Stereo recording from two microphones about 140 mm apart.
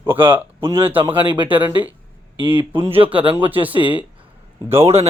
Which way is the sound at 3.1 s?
40° right (ahead or behind).